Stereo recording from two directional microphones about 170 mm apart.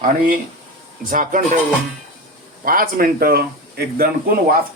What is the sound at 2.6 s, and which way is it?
Speech, 55° right (ahead or behind).